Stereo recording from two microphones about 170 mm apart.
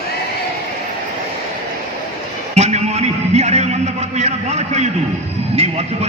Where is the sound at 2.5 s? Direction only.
40° right (ahead or behind).